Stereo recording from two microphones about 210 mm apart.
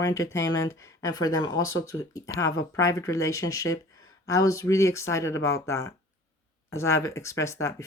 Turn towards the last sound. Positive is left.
turn(degrees=15)  # may be behind; listen again after turning